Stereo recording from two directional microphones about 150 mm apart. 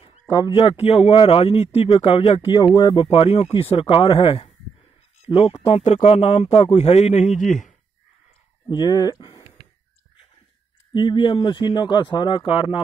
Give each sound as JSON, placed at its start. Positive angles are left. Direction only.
{"t": 0.0, "sound": "speech", "side_deg": 30}
{"t": 8.6, "sound": "speech", "side_deg": 30}
{"t": 10.9, "sound": "speech", "side_deg": 35}